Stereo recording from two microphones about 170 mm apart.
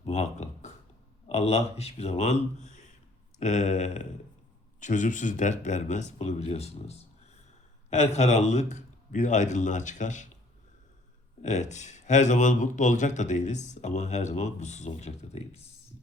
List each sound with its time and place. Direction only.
0.0 s a sound: 40° left (ahead or behind)
1.3 s a man's voice: 40° left (ahead or behind)
11.4 s speech: 45° left (ahead or behind)